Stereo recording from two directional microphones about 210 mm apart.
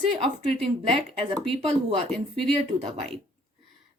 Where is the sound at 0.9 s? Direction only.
25° right (ahead or behind).